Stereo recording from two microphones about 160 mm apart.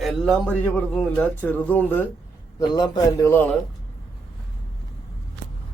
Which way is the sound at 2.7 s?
25° left (ahead or behind).